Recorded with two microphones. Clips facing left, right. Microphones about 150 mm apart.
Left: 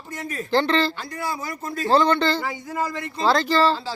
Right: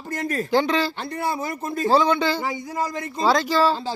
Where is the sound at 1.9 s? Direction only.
5° right (ahead or behind).